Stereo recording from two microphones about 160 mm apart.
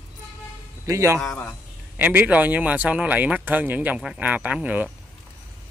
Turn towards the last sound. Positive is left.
turn(degrees=-10)  # may be behind; listen again after turning